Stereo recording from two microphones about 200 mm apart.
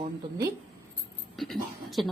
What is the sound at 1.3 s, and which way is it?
Speech, centre (ahead or behind).